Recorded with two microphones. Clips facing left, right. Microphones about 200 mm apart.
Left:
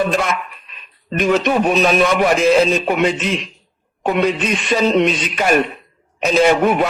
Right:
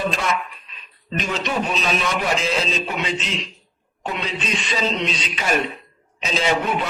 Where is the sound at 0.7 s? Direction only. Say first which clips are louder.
Left 5 dB; 55° left (ahead or behind).